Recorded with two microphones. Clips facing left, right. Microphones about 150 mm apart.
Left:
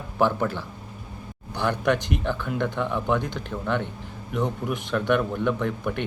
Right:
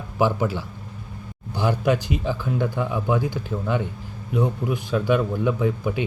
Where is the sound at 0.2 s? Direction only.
10° right (ahead or behind).